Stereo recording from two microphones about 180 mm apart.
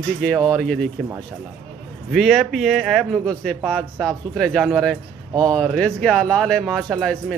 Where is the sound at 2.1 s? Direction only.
Centre (ahead or behind).